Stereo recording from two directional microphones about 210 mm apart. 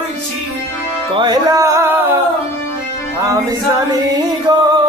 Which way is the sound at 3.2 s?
15° right (ahead or behind).